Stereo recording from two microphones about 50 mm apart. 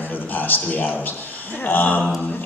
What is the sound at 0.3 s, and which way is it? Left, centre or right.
A man's voice, left.